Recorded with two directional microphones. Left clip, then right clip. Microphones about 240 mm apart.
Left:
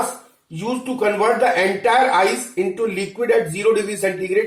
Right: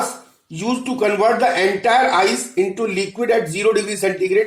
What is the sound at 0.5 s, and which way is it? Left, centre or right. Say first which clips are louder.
Speech: right 2 dB; right.